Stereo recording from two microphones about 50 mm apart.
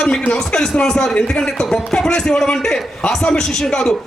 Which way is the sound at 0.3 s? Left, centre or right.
Centre.